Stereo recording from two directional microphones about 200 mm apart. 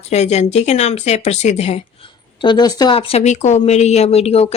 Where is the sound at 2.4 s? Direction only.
20° left (ahead or behind).